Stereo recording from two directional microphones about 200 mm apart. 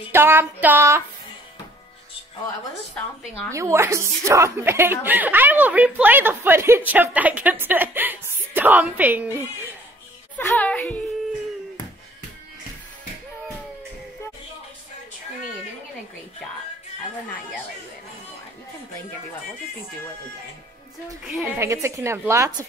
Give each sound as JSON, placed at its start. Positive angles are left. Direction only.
{"t": 0.1, "sound": "a woman's voice", "side_deg": -10}
{"t": 3.5, "sound": "a woman's voice", "side_deg": -15}
{"t": 10.3, "sound": "speech", "side_deg": 10}
{"t": 21.5, "sound": "a woman's voice", "side_deg": -15}